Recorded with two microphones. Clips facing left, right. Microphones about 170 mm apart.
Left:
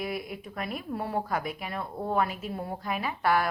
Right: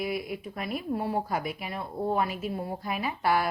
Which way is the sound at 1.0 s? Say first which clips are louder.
Left 1 dB; 15° right (ahead or behind).